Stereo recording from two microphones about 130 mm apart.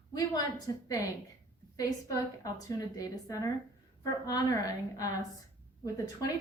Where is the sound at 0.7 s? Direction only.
30° left (ahead or behind).